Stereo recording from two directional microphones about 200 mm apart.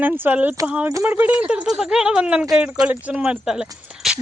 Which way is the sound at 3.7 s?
5° right (ahead or behind).